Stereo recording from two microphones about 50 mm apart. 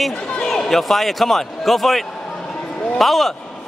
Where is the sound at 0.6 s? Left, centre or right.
Centre.